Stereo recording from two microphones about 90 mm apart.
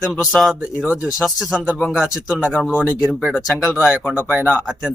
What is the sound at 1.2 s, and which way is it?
Speech, centre (ahead or behind).